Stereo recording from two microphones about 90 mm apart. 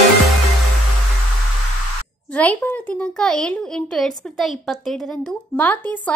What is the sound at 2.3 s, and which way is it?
Speech, 15° left (ahead or behind).